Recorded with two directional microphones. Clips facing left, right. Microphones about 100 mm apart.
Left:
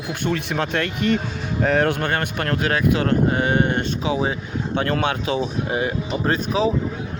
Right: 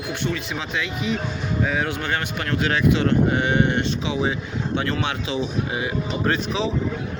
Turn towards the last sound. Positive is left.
turn(degrees=40)  # may be behind; listen again after turning